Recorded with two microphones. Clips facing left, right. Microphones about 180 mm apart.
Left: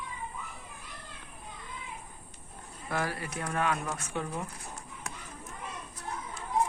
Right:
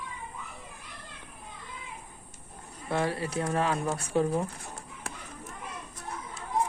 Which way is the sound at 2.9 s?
25° right (ahead or behind).